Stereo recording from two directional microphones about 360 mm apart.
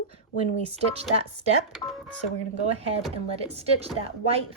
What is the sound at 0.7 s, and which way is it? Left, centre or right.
Speech, centre.